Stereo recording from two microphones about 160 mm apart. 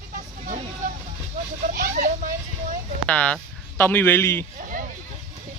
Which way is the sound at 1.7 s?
50° right (ahead or behind).